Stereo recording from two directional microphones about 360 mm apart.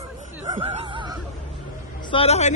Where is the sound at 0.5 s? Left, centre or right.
Centre.